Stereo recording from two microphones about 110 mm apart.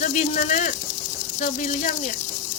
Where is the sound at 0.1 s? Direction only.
90° left.